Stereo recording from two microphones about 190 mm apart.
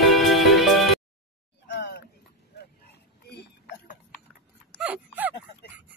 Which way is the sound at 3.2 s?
60° left (ahead or behind).